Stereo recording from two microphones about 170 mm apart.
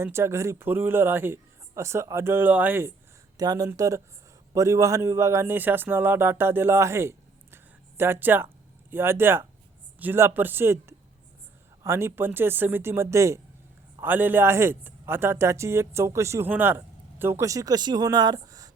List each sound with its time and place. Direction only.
0.0 s a man's voice: 15° right (ahead or behind)
3.3 s a man's voice: 20° right (ahead or behind)